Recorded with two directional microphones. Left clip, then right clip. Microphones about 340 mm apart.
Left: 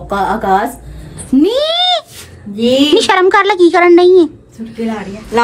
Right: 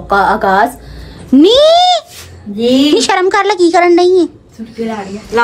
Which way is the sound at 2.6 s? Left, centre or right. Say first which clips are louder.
Even; centre.